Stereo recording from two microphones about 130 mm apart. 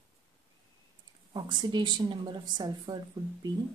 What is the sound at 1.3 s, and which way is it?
A woman's voice, 35° right (ahead or behind).